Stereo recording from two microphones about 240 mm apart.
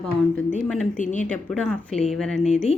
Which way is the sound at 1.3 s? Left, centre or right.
Centre.